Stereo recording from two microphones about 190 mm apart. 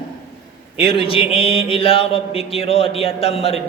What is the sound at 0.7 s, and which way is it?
Mantra, 30° left (ahead or behind).